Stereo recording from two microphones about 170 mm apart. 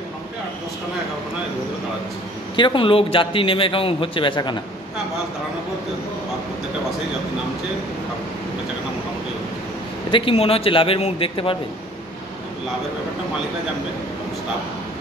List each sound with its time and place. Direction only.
2.5 s a man's voice: 30° left (ahead or behind)
10.1 s a man's voice: 35° left (ahead or behind)